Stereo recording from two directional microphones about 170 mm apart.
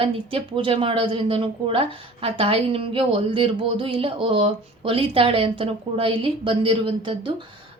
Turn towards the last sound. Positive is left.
turn(degrees=-30)  # may be behind; listen again after turning